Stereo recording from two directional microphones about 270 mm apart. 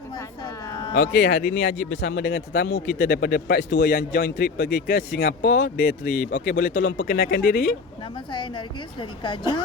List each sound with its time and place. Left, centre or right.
0.9 s a man's voice: left
8.3 s a woman's voice: centre